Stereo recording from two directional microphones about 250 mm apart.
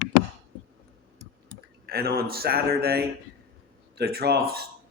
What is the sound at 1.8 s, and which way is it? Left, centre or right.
A man's voice, right.